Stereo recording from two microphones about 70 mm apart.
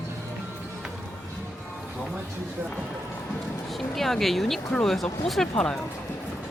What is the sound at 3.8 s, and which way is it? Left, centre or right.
Speech, centre.